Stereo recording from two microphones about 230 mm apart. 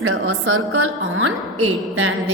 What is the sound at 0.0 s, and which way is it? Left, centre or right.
Speech, right.